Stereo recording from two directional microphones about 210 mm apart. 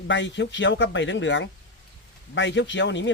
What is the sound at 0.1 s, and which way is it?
Speech, 60° left (ahead or behind).